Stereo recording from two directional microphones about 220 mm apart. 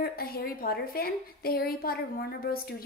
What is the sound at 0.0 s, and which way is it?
A woman's voice, 45° left (ahead or behind).